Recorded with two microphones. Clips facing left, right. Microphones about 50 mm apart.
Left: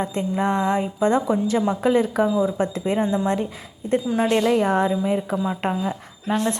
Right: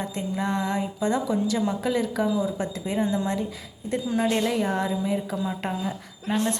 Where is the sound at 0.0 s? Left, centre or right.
Left.